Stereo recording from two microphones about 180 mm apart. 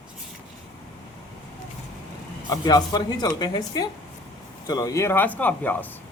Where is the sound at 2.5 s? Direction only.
20° left (ahead or behind).